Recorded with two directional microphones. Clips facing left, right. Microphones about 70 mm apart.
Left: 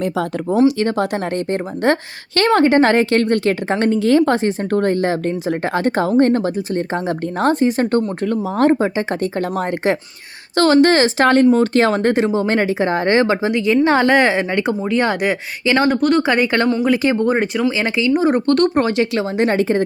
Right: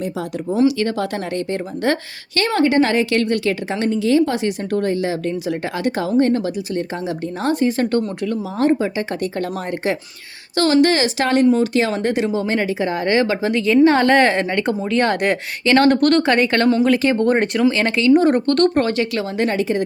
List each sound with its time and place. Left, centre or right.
0.5 s a woman's voice: left
3.8 s a woman's voice: left; by 17.3 s centre
17.3 s speech: centre
18.6 s speech: centre; by 19.8 s left